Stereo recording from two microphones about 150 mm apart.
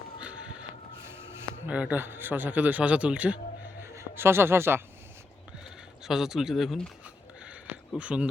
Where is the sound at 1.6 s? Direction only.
10° right (ahead or behind).